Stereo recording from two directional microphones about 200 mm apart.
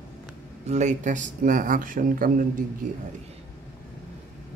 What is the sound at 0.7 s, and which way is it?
Speech, 35° right (ahead or behind).